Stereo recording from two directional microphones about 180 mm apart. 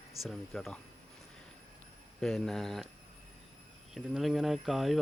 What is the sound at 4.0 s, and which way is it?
Speech, centre (ahead or behind).